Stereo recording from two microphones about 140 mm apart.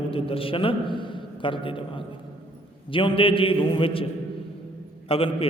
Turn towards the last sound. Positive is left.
turn(degrees=40)  # may be behind; listen again after turning